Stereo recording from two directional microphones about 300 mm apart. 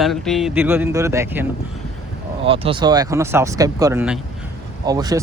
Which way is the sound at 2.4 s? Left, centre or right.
Centre.